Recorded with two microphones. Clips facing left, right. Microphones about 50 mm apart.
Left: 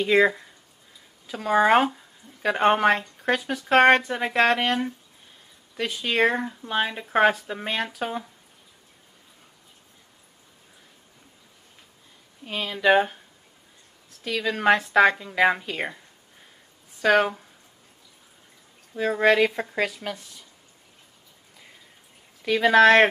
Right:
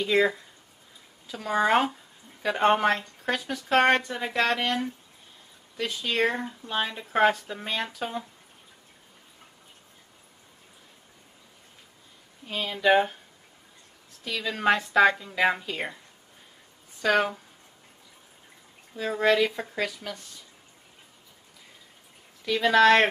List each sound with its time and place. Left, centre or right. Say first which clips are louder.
1.3 s speech: left 4 dB; left
12.6 s speech: left 2 dB; centre
14.3 s speech: left 4 dB; centre
17.0 s speech: left 4 dB; centre
18.9 s speech: left 3 dB; centre
22.4 s speech: left 3 dB; left